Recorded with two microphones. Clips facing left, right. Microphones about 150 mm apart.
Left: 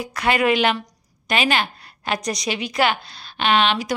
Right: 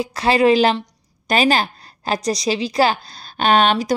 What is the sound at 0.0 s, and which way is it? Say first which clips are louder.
A woman's voice: right 5 dB; 30° right (ahead or behind).